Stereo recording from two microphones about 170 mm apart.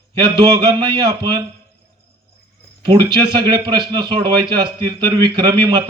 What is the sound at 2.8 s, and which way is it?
A man's voice, 25° right (ahead or behind).